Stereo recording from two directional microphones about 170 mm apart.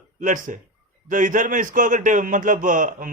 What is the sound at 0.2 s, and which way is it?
A man's voice, 50° right (ahead or behind).